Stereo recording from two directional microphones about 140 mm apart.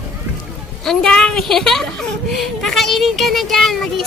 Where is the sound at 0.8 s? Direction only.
5° left (ahead or behind).